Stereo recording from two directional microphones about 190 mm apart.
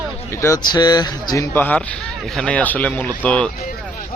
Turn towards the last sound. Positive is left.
turn(degrees=5)  # may be behind; listen again after turning